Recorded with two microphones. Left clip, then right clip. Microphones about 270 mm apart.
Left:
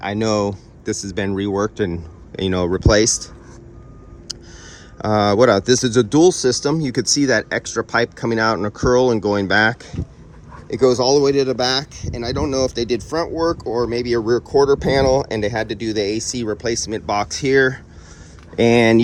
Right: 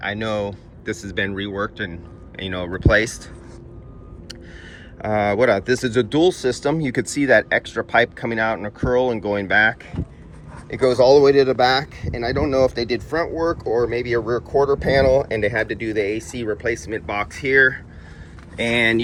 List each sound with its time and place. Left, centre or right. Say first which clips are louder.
0.0 s a man's voice: left 4 dB; left
0.9 s a man's voice: left 1 dB; centre
4.9 s a man's voice: left 4 dB; centre